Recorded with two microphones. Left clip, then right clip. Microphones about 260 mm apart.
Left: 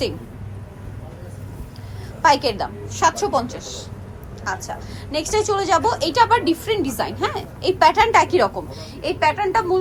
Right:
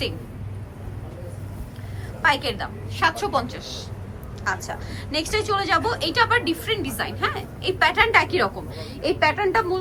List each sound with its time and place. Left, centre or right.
2.2 s a woman's voice: centre